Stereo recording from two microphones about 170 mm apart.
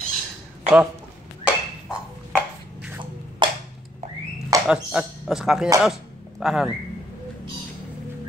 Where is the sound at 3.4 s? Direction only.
30° right (ahead or behind).